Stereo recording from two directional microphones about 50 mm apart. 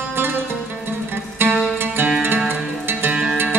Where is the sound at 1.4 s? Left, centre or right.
Right.